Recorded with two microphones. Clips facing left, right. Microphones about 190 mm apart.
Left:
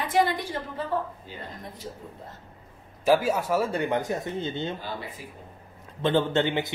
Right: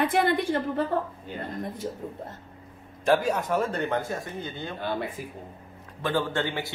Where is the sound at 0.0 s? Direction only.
55° right (ahead or behind).